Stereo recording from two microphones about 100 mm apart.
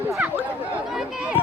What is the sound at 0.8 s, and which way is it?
Speech, 5° right (ahead or behind).